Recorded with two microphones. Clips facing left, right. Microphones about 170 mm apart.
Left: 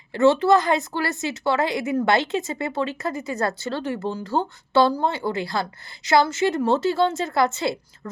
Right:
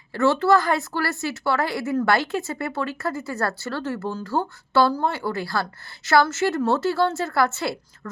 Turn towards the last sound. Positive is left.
turn(degrees=20)  # may be behind; listen again after turning